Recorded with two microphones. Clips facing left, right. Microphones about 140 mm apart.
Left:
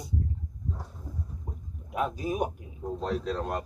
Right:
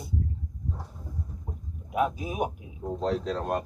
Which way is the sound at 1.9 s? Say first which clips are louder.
Right 2 dB; 5° right (ahead or behind).